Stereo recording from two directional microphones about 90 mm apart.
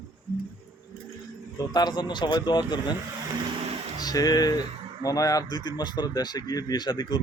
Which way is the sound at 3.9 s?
45° left (ahead or behind).